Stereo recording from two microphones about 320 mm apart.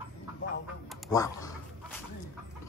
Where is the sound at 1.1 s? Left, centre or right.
Centre.